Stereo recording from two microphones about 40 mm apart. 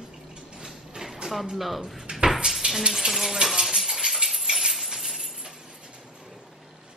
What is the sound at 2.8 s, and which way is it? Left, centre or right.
Speech, centre.